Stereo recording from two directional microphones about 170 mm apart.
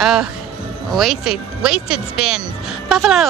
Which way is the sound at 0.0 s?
Centre (ahead or behind).